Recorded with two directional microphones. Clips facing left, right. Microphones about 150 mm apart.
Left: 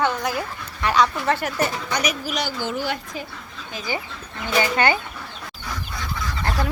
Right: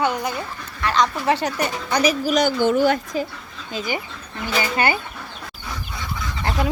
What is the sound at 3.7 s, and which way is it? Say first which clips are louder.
Speech: right 2 dB; 25° right (ahead or behind).